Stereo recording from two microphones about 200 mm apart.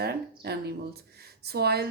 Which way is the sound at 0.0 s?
55° right (ahead or behind).